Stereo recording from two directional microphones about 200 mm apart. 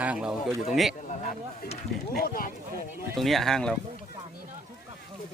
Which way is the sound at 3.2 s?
Centre (ahead or behind).